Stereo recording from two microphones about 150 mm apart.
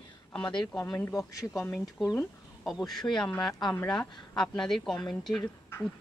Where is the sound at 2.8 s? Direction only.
5° left (ahead or behind).